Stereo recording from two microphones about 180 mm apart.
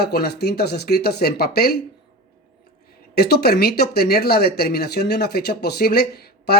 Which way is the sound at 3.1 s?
60° left (ahead or behind).